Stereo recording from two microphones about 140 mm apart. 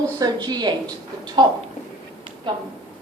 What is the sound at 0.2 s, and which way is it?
Speech, 30° right (ahead or behind).